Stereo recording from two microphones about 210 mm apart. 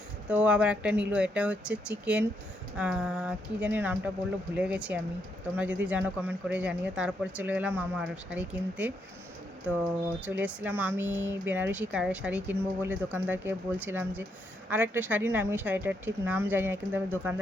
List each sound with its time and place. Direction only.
0.3 s speech: 5° right (ahead or behind)
10.2 s speech: 5° right (ahead or behind)